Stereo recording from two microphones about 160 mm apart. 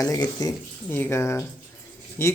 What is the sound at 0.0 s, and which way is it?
Speech, 20° left (ahead or behind).